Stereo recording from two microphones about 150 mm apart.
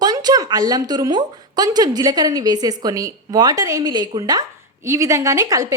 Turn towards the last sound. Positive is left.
turn(degrees=-25)  # may be behind; listen again after turning